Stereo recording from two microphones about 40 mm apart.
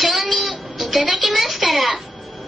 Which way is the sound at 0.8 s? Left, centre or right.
Centre.